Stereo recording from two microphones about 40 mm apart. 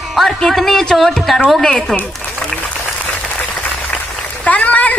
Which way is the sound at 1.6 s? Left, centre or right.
Centre.